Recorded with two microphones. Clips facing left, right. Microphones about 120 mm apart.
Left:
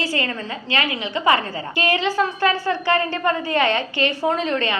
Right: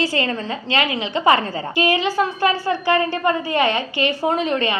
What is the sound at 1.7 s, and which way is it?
A woman's voice, 10° right (ahead or behind).